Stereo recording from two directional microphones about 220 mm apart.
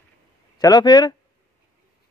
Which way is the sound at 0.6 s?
15° left (ahead or behind).